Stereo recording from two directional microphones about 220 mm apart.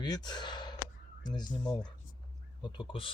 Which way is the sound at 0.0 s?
20° left (ahead or behind).